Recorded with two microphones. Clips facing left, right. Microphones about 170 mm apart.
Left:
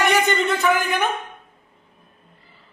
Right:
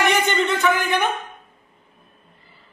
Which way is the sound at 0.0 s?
Centre (ahead or behind).